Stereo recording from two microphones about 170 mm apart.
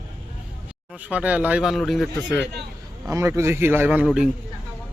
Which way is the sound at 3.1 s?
15° right (ahead or behind).